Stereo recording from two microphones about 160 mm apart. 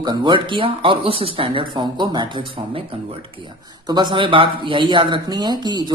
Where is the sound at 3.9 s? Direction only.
30° right (ahead or behind).